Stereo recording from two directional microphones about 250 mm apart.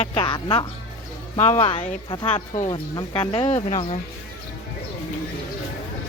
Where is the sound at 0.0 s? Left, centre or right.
Left.